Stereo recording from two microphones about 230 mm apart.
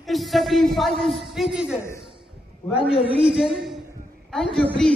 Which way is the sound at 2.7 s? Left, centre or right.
Left.